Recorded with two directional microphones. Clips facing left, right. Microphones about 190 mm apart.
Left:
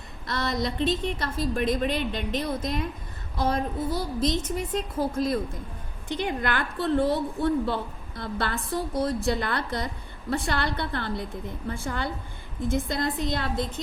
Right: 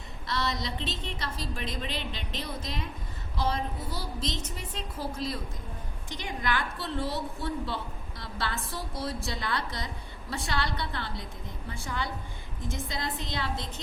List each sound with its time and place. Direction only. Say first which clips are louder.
0.3 s a woman's voice: left 4 dB; 55° left (ahead or behind)